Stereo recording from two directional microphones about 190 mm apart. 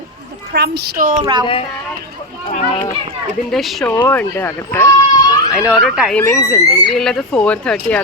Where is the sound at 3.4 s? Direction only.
Centre (ahead or behind).